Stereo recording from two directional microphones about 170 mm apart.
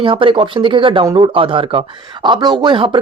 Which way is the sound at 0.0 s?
30° right (ahead or behind).